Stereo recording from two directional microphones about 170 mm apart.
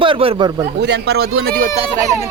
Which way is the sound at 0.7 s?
90° right.